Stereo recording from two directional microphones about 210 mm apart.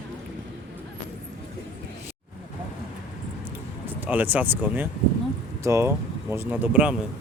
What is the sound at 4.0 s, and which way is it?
Speech, 10° right (ahead or behind).